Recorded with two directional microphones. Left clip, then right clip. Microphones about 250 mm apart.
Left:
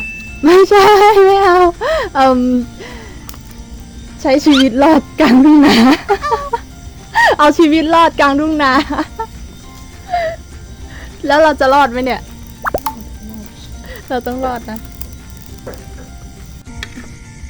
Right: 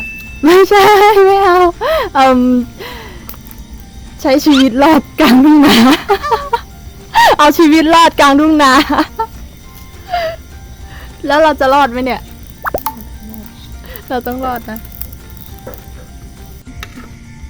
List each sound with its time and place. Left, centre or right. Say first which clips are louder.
0.4 s speech: right 1 dB; centre
4.2 s speech: right 1 dB; centre
6.3 s chicken: right 3 dB; centre
7.1 s speech: right 2 dB; centre
10.1 s music: even; centre
11.3 s speech: even; centre
12.6 s plop: even; centre
13.9 s speech: right 1 dB; centre